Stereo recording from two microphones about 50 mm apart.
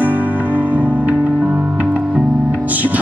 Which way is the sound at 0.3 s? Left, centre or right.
Left.